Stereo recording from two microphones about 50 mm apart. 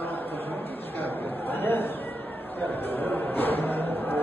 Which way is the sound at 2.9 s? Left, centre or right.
Left.